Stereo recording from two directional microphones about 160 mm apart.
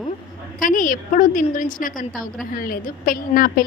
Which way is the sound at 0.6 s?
55° left (ahead or behind).